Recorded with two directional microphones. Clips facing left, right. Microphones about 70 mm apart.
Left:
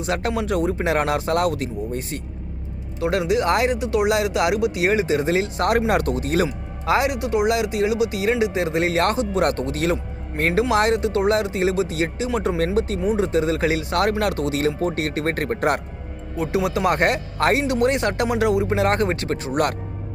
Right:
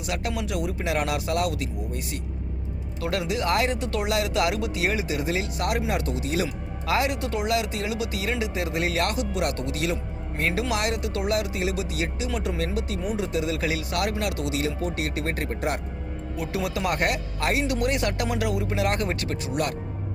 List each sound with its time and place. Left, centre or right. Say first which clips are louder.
0.0 s speech: left 6 dB; left
3.0 s speech: left 7 dB; left
3.7 s speech: left 7 dB; centre; by 6.5 s left
6.8 s speech: left 5 dB; left
16.4 s speech: left 7 dB; left
17.3 s speech: left 7 dB; left
17.6 s speech: left 5 dB; left